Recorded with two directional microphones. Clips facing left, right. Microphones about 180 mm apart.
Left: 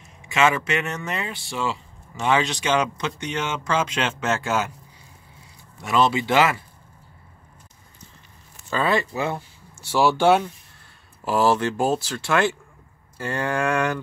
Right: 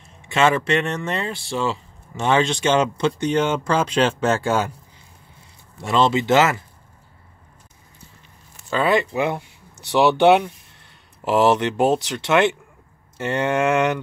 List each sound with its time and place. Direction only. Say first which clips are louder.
0.5 s speech: right 4 dB; 30° right (ahead or behind)
5.8 s speech: right 2 dB; 25° right (ahead or behind)
8.7 s speech: right 3 dB; 15° right (ahead or behind)